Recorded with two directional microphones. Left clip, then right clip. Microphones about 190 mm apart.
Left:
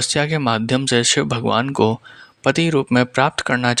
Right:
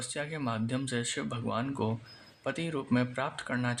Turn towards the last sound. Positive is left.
turn(degrees=50)  # may be behind; listen again after turning